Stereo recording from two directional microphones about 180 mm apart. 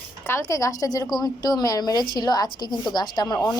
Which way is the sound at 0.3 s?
15° left (ahead or behind).